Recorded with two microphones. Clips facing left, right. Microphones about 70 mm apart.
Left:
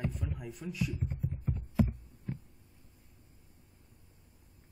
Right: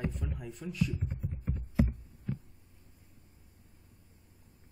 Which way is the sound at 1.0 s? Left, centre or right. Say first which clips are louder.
Left 2 dB; right.